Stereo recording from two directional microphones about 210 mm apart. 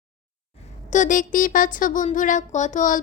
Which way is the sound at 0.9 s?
35° left (ahead or behind).